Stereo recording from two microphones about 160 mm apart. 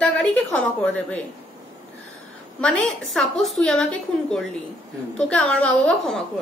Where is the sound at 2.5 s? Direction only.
5° left (ahead or behind).